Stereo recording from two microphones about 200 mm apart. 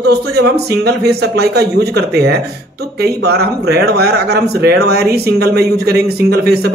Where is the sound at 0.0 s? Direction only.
55° right (ahead or behind).